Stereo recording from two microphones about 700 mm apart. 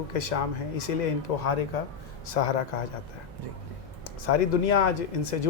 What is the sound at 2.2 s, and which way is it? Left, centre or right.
Speech, left.